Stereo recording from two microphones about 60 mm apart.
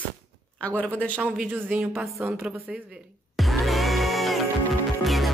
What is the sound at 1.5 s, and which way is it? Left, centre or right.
Speech, right.